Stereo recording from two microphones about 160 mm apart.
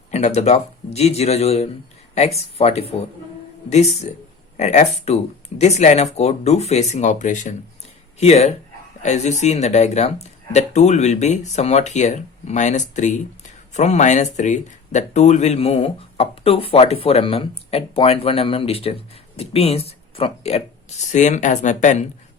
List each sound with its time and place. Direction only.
0.1 s speech: 45° left (ahead or behind)
21.1 s speech: 50° left (ahead or behind)